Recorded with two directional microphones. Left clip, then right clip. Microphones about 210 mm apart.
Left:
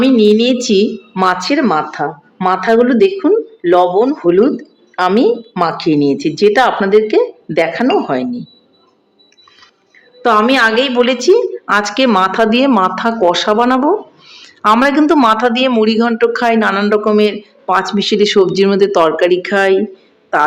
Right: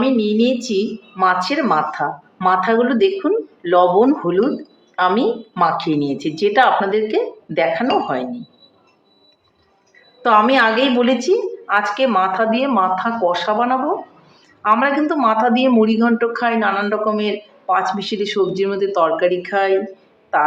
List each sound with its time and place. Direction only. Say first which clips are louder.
0.0 s a woman's voice: left 7 dB; 55° left (ahead or behind)
10.2 s a man's voice: left 3 dB; 50° left (ahead or behind)